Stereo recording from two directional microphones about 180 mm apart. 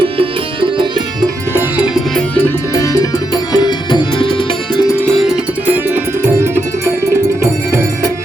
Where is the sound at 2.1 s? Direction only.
10° left (ahead or behind).